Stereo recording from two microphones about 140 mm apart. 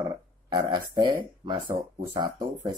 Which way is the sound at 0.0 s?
30° right (ahead or behind).